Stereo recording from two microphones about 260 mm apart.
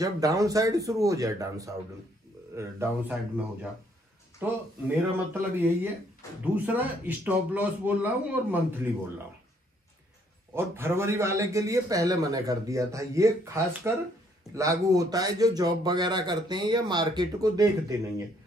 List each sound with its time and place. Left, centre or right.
0.0 s a man's voice: centre
4.4 s a man's voice: centre
10.5 s a man's voice: centre